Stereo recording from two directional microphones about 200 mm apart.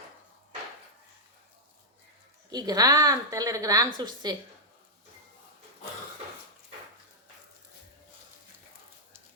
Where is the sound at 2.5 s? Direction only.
20° right (ahead or behind).